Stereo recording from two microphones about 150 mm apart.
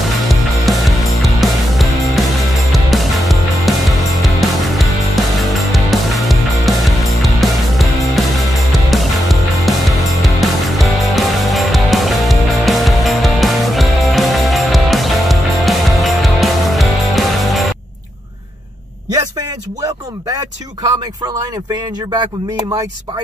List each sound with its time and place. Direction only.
0.3 s music: centre (ahead or behind)
19.1 s speech: 25° right (ahead or behind)